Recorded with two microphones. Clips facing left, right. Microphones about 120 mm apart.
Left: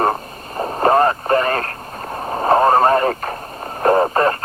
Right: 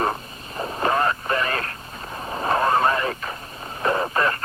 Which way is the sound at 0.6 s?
45° left (ahead or behind).